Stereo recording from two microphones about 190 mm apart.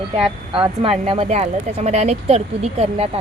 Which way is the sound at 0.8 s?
30° right (ahead or behind).